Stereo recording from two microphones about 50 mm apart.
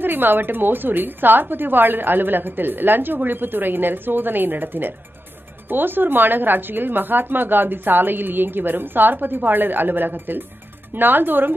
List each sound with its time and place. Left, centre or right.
0.0 s a woman's voice: right